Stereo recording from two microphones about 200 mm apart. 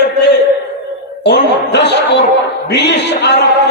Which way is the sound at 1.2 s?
60° left (ahead or behind).